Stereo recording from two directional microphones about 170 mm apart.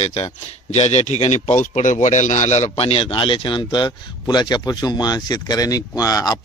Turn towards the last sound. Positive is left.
turn(degrees=20)  # may be behind; listen again after turning